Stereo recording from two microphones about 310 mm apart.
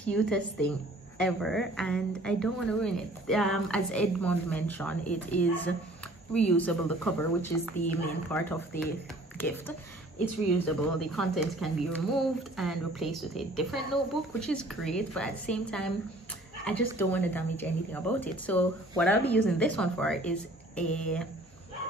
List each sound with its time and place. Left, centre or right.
0.0 s a woman's voice: centre
6.5 s a woman's voice: centre